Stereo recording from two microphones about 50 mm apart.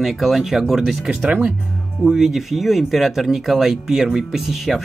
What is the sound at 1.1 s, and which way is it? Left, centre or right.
Speech, centre.